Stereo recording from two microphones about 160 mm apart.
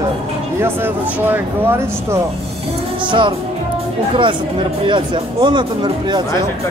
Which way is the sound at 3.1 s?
30° right (ahead or behind).